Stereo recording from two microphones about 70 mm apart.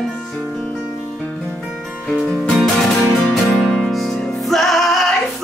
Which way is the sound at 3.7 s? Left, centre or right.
Centre.